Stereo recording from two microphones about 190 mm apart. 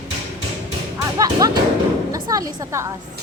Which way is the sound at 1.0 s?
20° right (ahead or behind).